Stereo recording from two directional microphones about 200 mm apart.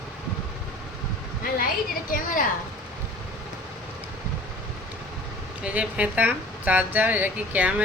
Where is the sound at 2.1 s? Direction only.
45° left (ahead or behind).